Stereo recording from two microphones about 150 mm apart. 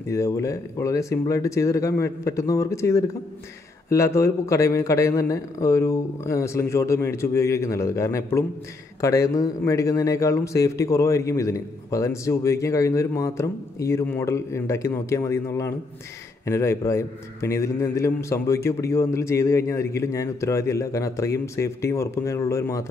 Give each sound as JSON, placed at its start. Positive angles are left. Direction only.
{"t": 0.1, "sound": "a man's voice", "side_deg": 20}